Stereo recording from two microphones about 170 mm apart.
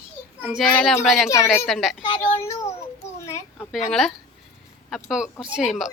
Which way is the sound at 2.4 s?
15° left (ahead or behind).